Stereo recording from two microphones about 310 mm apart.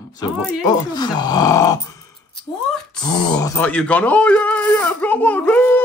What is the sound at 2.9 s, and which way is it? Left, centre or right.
Speech, centre.